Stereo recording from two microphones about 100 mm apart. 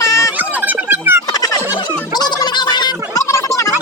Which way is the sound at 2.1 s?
45° left (ahead or behind).